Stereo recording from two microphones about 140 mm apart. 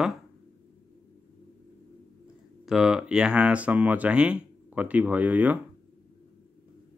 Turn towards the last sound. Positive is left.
turn(degrees=-10)  # may be behind; listen again after turning